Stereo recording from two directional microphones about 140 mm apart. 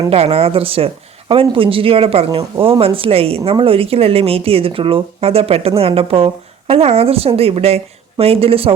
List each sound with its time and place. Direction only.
0.1 s speech: 45° right (ahead or behind)